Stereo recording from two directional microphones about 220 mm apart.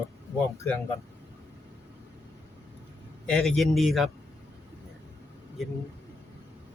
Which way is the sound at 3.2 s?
Centre (ahead or behind).